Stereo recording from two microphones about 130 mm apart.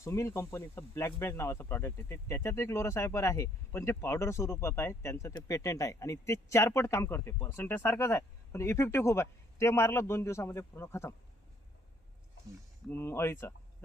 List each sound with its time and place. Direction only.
0.0 s speech: 20° left (ahead or behind)
12.9 s speech: 20° left (ahead or behind)